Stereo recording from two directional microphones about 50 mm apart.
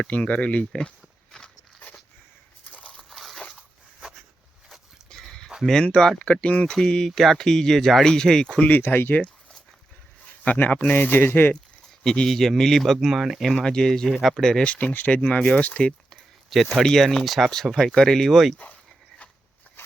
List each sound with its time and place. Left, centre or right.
0.2 s speech: left
2.7 s a sound: left
3.0 s a sound: centre
5.0 s a sound: centre
5.8 s speech: centre
8.8 s speech: left
10.4 s speech: left
12.0 s speech: centre
13.6 s speech: centre
14.2 s speech: centre
14.6 s speech: left
15.2 s speech: centre
16.8 s speech: centre